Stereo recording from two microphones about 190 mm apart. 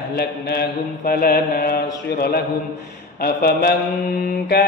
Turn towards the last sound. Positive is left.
turn(degrees=55)  # may be behind; listen again after turning